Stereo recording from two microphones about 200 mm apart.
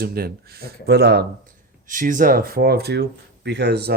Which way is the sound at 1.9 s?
40° right (ahead or behind).